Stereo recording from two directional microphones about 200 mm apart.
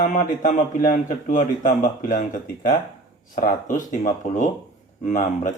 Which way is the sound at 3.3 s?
40° left (ahead or behind).